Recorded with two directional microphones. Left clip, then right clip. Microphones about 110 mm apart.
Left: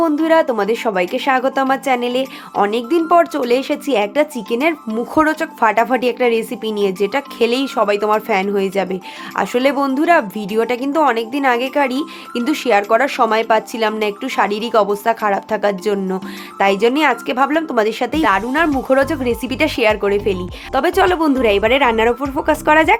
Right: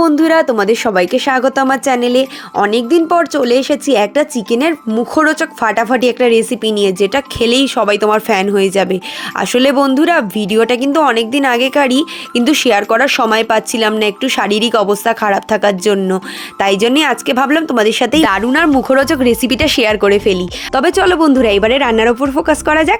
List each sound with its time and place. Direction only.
0.0 s a woman's voice: 55° right (ahead or behind); by 13.3 s 40° right (ahead or behind)
13.3 s a woman's voice: 50° right (ahead or behind)